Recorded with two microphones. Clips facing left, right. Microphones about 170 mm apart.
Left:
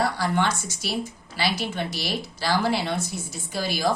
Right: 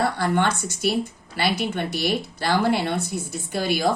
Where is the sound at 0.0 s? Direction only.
55° right (ahead or behind).